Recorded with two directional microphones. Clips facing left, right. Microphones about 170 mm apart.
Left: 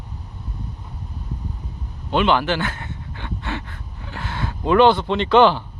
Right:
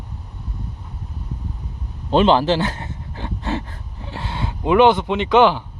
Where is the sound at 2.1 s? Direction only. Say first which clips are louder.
Right 4 dB; 35° right (ahead or behind); by 5.6 s 15° right (ahead or behind).